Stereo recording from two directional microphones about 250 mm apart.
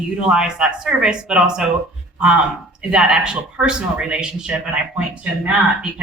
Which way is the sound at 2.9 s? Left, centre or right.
Centre.